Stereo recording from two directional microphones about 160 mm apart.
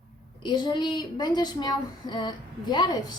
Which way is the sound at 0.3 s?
30° left (ahead or behind).